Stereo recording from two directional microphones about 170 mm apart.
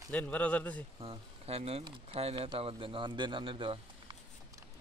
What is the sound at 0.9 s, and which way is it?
Speech, 35° right (ahead or behind).